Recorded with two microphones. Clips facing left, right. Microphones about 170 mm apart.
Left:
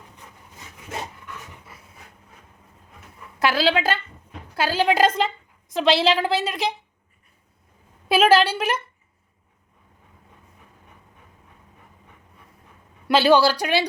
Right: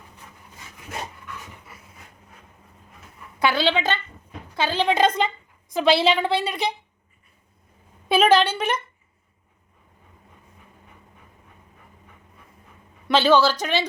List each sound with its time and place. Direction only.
3.4 s a woman's voice: centre (ahead or behind)
8.0 s a woman's voice: 5° left (ahead or behind)
13.1 s speech: 10° left (ahead or behind)